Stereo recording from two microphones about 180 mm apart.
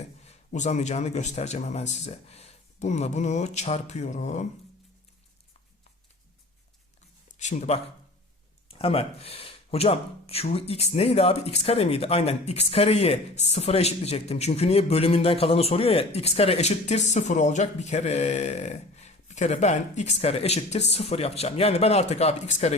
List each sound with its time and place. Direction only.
0.3 s speech: 40° left (ahead or behind)
7.3 s speech: 40° left (ahead or behind)
8.8 s speech: 35° left (ahead or behind)